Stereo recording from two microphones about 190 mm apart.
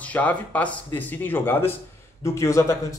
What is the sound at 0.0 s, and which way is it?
A man's voice, 10° left (ahead or behind).